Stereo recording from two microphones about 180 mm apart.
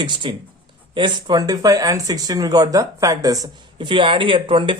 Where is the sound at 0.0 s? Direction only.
25° right (ahead or behind).